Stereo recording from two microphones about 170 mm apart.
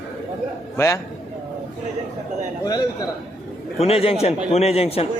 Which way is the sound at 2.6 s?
25° left (ahead or behind).